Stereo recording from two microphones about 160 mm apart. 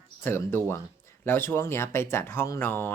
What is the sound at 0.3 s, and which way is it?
Speech, 15° left (ahead or behind).